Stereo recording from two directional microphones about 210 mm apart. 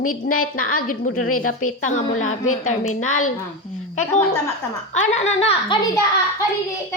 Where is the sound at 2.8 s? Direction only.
90° left.